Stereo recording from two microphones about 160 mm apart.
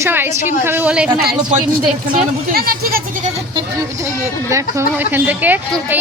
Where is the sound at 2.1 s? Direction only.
65° right (ahead or behind).